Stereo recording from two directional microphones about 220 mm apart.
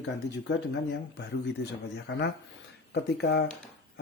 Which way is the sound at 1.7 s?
50° left (ahead or behind).